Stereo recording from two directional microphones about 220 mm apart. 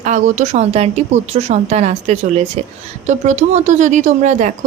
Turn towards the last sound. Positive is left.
turn(degrees=-35)  # may be behind; listen again after turning